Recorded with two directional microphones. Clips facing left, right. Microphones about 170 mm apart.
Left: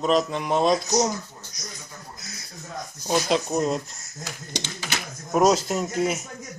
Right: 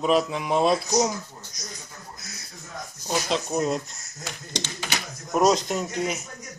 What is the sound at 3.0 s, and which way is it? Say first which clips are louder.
Speech: left 4 dB; centre (ahead or behind).